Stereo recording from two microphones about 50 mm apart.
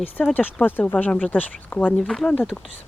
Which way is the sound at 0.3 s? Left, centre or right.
Left.